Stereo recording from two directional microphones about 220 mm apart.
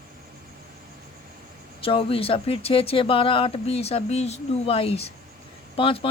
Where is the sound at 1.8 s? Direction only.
25° left (ahead or behind).